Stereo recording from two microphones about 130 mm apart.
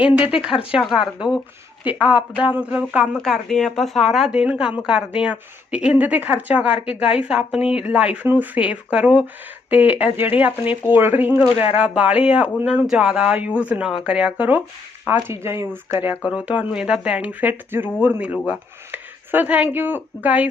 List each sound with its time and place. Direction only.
0.0 s speech: 10° right (ahead or behind)